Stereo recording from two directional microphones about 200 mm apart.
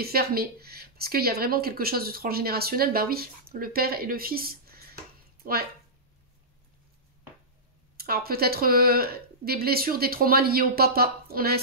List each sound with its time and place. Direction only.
0.0 s speech: 50° right (ahead or behind)
8.0 s speech: 50° right (ahead or behind)